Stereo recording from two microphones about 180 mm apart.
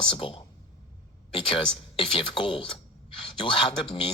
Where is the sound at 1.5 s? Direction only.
30° left (ahead or behind).